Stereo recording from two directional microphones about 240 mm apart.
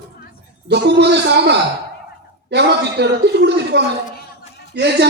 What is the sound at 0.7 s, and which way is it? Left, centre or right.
Speech, right.